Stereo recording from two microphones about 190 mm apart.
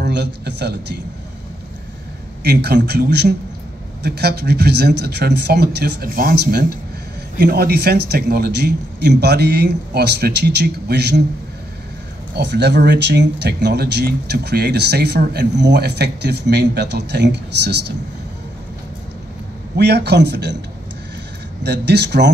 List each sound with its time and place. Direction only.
0.0 s a man's voice: 60° right (ahead or behind)
2.4 s a man's voice: 60° right (ahead or behind)
12.4 s a man's voice: 65° right (ahead or behind)
19.8 s a man's voice: 60° right (ahead or behind)
21.6 s a man's voice: 60° right (ahead or behind)